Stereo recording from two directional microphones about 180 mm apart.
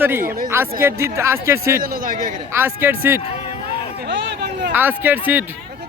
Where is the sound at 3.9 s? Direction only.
70° right (ahead or behind).